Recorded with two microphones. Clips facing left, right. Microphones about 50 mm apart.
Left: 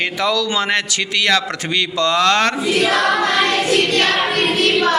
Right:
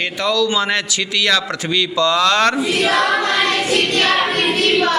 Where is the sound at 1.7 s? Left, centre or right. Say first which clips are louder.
Right 1 dB; left.